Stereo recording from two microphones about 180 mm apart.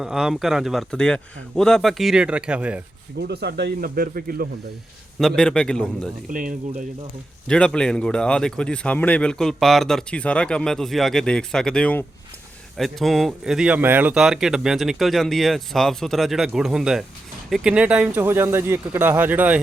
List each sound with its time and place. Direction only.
0.0 s speech: 5° right (ahead or behind)
3.2 s speech: 65° right (ahead or behind)
5.4 s speech: 5° left (ahead or behind)
6.3 s speech: 45° right (ahead or behind)
7.4 s speech: 5° left (ahead or behind)